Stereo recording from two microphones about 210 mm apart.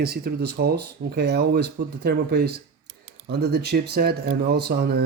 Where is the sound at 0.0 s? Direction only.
50° right (ahead or behind).